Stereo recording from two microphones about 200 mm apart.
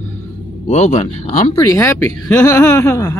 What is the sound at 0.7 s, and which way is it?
Speech, 35° left (ahead or behind).